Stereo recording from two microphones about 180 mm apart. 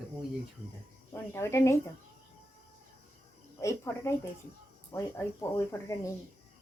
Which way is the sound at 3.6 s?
15° left (ahead or behind).